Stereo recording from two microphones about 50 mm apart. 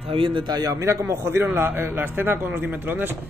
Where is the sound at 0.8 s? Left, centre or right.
Right.